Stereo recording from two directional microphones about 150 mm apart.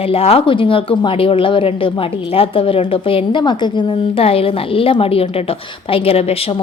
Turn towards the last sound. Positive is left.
turn(degrees=40)  # may be behind; listen again after turning